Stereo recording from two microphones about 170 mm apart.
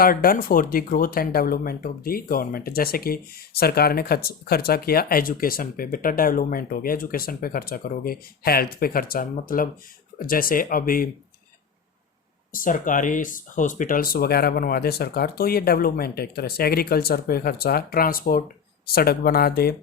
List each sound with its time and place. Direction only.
0.0 s speech: 60° left (ahead or behind)
12.5 s speech: 55° left (ahead or behind)